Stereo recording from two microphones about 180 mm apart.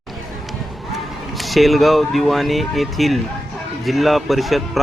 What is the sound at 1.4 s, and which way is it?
Speech, centre (ahead or behind).